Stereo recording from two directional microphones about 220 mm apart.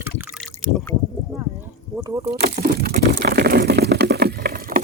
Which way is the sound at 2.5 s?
45° right (ahead or behind).